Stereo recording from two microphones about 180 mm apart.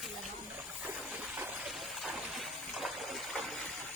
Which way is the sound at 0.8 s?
10° right (ahead or behind).